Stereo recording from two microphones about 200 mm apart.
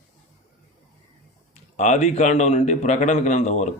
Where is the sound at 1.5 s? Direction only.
35° left (ahead or behind).